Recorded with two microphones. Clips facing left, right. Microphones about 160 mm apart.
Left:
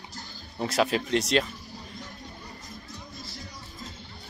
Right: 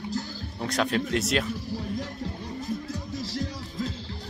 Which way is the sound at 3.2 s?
90° right.